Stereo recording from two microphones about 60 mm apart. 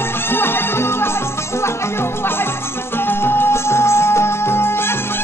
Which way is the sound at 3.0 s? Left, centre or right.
Left.